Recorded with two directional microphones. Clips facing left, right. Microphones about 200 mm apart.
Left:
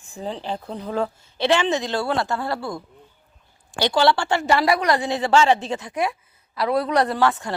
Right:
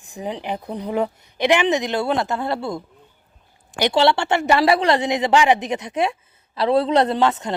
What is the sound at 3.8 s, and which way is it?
A woman's voice, 25° right (ahead or behind).